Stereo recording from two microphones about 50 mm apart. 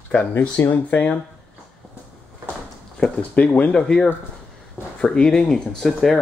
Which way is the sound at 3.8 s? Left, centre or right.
Centre.